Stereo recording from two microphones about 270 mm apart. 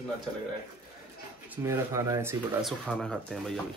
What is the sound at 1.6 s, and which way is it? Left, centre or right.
Speech, centre.